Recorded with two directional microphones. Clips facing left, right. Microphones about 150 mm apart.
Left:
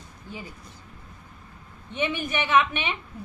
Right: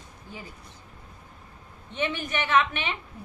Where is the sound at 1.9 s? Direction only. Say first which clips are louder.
Left 2 dB; 10° left (ahead or behind).